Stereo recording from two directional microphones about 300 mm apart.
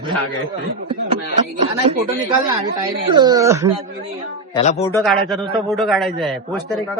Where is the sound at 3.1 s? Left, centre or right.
Centre.